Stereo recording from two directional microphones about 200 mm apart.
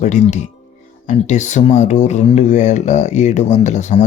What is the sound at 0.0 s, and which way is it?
Speech, 35° left (ahead or behind).